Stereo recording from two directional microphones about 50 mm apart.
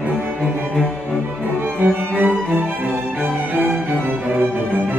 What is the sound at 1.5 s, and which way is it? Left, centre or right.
Cello, right.